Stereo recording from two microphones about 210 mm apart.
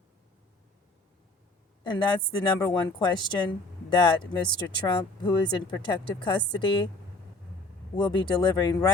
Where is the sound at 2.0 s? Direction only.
20° left (ahead or behind).